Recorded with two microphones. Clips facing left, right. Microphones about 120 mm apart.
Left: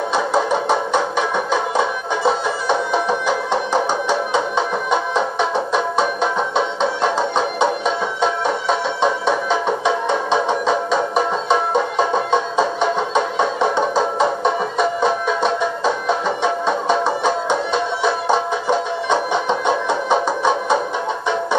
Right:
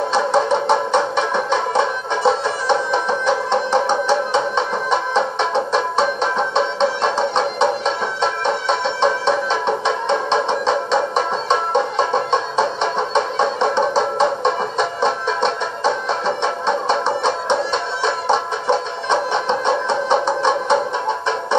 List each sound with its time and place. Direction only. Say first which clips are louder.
0.1 s a sound: right 1 dB; 25° right (ahead or behind)
1.1 s music: right 1 dB; 5° left (ahead or behind)
15.0 s music: left 1 dB; 5° left (ahead or behind)
18.0 s music: right 1 dB; 10° left (ahead or behind)